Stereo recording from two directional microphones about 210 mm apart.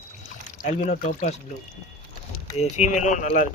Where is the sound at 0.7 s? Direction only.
35° left (ahead or behind).